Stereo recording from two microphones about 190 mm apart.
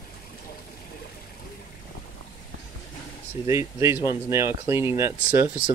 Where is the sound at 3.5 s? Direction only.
15° right (ahead or behind).